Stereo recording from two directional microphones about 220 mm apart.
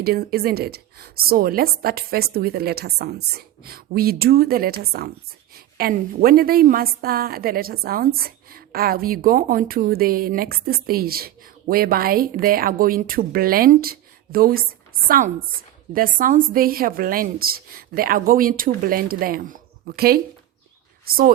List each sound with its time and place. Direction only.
0.0 s a woman's voice: 45° right (ahead or behind)